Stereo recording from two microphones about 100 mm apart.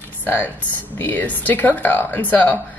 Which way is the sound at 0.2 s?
20° left (ahead or behind).